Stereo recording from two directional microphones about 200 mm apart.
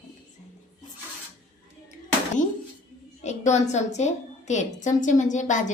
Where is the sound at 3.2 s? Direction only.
35° left (ahead or behind).